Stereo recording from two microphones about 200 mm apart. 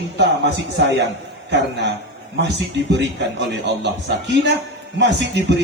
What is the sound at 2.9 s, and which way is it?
Speech, 60° right (ahead or behind).